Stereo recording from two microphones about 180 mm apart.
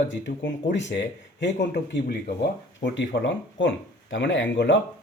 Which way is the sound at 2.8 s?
90° left.